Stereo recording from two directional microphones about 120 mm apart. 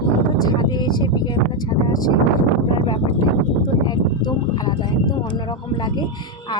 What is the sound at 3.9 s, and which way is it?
Speech, 35° left (ahead or behind).